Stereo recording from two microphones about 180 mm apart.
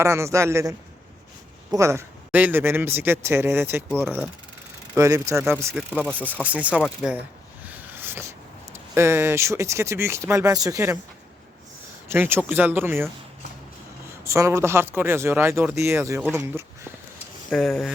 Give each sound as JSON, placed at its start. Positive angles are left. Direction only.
{"t": 0.0, "sound": "speech", "side_deg": -15}
{"t": 6.0, "sound": "speech", "side_deg": 10}
{"t": 6.4, "sound": "speech", "side_deg": -10}
{"t": 7.6, "sound": "a sound", "side_deg": -10}
{"t": 9.0, "sound": "speech", "side_deg": -15}
{"t": 12.0, "sound": "speech", "side_deg": -10}
{"t": 14.3, "sound": "speech", "side_deg": -15}
{"t": 17.5, "sound": "speech", "side_deg": 0}